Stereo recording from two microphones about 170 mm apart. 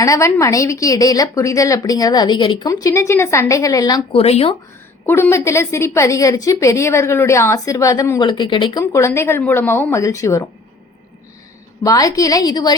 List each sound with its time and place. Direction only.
0.0 s a woman's voice: 20° left (ahead or behind)
4.1 s speech: 35° left (ahead or behind)
5.0 s a woman's voice: 15° left (ahead or behind)
8.8 s a woman's voice: 15° left (ahead or behind)
11.8 s a woman's voice: 20° left (ahead or behind)